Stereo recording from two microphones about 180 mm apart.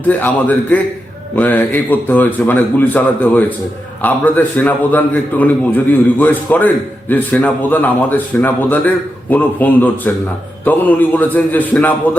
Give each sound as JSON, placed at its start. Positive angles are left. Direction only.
{"t": 0.1, "sound": "a man's voice", "side_deg": 10}